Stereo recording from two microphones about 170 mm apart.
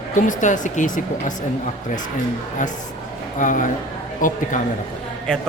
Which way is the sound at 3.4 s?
50° left (ahead or behind).